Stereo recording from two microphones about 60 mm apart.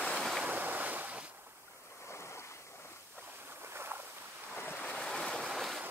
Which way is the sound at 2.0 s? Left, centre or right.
Left.